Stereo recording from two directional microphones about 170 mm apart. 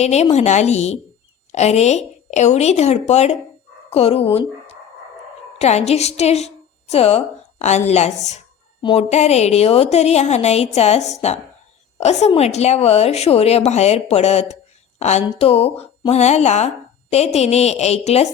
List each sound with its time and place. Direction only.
0.0 s a woman's voice: 40° left (ahead or behind)